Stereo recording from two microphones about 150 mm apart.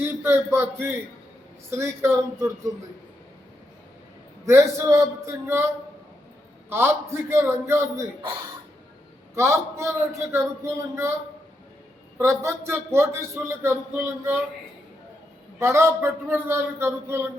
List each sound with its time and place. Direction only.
0.0 s a man's voice: 15° right (ahead or behind)
4.4 s a man's voice: 15° right (ahead or behind)
9.3 s a man's voice: 20° right (ahead or behind)
12.1 s a man's voice: 20° right (ahead or behind)
15.5 s a man's voice: 20° right (ahead or behind)